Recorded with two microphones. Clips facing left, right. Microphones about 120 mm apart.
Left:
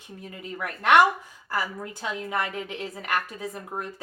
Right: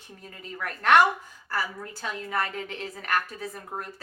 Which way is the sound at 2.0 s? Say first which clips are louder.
Left 1 dB; 15° left (ahead or behind).